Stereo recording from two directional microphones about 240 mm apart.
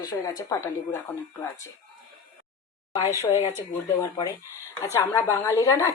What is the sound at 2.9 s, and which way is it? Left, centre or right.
Speech, centre.